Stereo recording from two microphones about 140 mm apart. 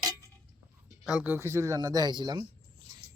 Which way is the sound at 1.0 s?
10° right (ahead or behind).